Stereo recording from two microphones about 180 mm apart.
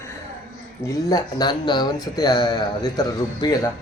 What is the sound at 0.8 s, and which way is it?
Speech, 20° left (ahead or behind).